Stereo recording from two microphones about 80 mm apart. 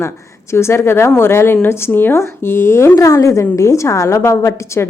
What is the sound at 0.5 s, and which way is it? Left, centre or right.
A woman's voice, left.